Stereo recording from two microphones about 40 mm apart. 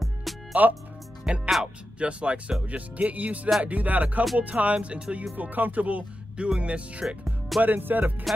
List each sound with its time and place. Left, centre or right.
0.0 s music: centre
1.2 s speech: right
2.7 s music: right
5.3 s speech: right
7.2 s music: centre
7.6 s speech: right